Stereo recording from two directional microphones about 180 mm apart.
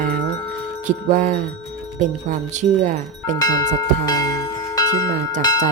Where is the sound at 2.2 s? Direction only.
45° right (ahead or behind).